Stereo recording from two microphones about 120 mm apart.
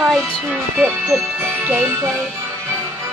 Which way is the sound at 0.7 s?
10° right (ahead or behind).